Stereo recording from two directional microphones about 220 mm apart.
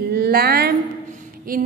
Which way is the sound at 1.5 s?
40° right (ahead or behind).